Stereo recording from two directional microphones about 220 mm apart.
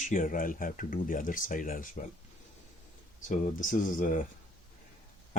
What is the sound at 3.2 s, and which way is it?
Speech, 35° left (ahead or behind).